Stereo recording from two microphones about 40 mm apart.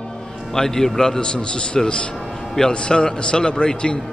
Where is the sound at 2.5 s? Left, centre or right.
Left.